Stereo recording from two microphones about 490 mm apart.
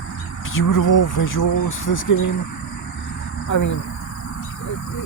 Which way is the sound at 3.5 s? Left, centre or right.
Left.